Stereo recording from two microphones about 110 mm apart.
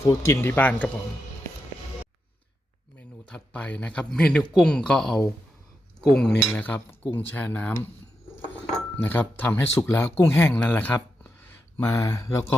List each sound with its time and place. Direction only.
0.0 s speech: 25° left (ahead or behind)
3.0 s speech: 10° left (ahead or behind)
6.6 s speech: 15° left (ahead or behind)
9.0 s speech: 15° left (ahead or behind)
11.8 s speech: 30° left (ahead or behind)